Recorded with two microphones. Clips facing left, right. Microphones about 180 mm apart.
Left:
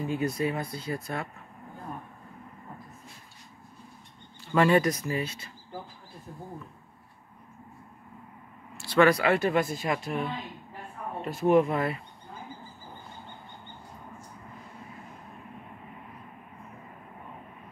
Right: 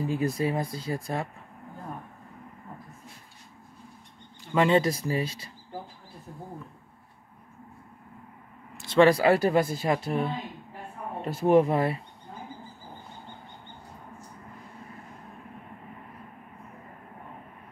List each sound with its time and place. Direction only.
0.0 s speech: 35° right (ahead or behind)
4.5 s speech: 20° right (ahead or behind)
8.7 s speech: 25° right (ahead or behind)
11.4 s speech: 35° right (ahead or behind)